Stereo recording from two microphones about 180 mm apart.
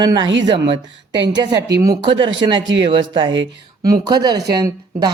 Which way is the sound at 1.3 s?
25° right (ahead or behind).